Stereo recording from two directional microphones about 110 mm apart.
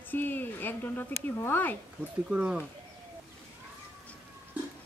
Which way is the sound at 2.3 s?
10° right (ahead or behind).